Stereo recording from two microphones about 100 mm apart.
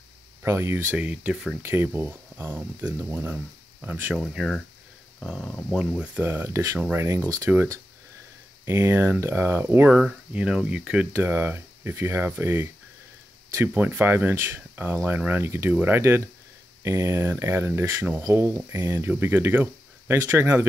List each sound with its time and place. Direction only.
0.4 s speech: 25° right (ahead or behind)
0.9 s speech: 15° right (ahead or behind)
1.3 s speech: 5° right (ahead or behind)
1.6 s speech: 20° right (ahead or behind)
4.1 s speech: 5° right (ahead or behind)
5.8 s speech: 15° right (ahead or behind); by 6.8 s 30° right (ahead or behind)
6.8 s speech: 20° right (ahead or behind)
7.2 s speech: 30° right (ahead or behind)
8.6 s speech: 25° right (ahead or behind); by 11.1 s 10° right (ahead or behind)
11.1 s speech: 25° right (ahead or behind)
13.7 s speech: 20° right (ahead or behind)